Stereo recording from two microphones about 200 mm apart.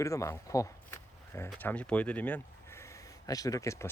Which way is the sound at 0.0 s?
15° left (ahead or behind).